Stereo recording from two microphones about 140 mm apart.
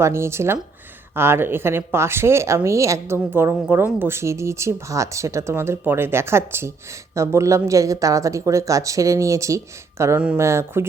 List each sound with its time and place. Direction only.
0.0 s speech: 20° right (ahead or behind)